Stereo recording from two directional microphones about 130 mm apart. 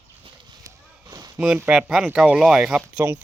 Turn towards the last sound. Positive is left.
turn(degrees=-15)  # may be behind; listen again after turning